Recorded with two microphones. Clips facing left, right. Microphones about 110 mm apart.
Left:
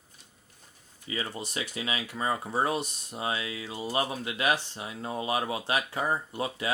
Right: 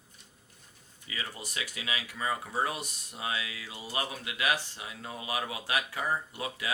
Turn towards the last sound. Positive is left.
turn(degrees=30)  # may be behind; listen again after turning